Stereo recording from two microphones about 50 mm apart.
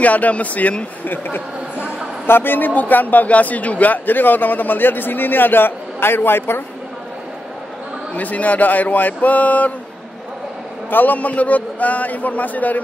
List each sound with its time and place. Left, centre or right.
0.0 s a man's voice: left
1.0 s a man's voice: left
8.1 s a man's voice: left
10.9 s a man's voice: left